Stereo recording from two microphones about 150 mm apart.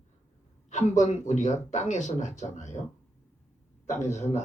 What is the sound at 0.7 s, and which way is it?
Speech, 50° left (ahead or behind).